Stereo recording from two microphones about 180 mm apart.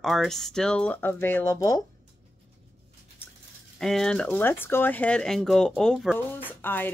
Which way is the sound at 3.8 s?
Centre (ahead or behind).